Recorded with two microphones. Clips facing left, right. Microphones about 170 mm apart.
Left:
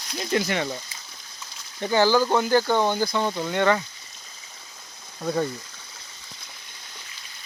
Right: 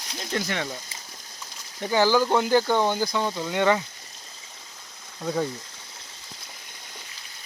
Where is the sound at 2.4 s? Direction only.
15° right (ahead or behind).